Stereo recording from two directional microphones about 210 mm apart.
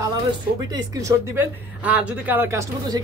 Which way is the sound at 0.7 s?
15° right (ahead or behind).